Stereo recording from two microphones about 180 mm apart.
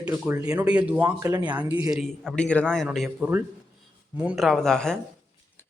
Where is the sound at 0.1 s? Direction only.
15° right (ahead or behind); by 4.9 s 5° left (ahead or behind).